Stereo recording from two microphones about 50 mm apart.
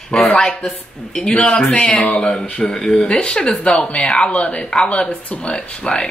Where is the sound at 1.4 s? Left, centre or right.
Left.